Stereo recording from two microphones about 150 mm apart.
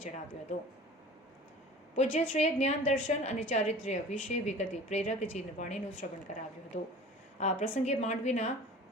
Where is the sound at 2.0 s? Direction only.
50° left (ahead or behind).